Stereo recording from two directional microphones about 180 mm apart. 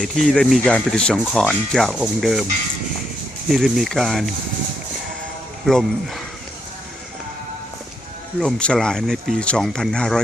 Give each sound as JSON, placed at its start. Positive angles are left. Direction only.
{"t": 0.0, "sound": "speech", "side_deg": 0}
{"t": 3.5, "sound": "speech", "side_deg": 0}
{"t": 5.6, "sound": "speech", "side_deg": 0}
{"t": 8.4, "sound": "speech", "side_deg": 5}